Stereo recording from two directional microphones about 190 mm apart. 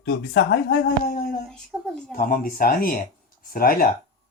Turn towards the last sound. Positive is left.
turn(degrees=50)  # may be behind; listen again after turning